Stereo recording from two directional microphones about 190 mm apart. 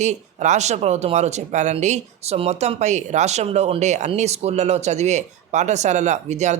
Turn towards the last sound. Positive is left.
turn(degrees=-40)  # may be behind; listen again after turning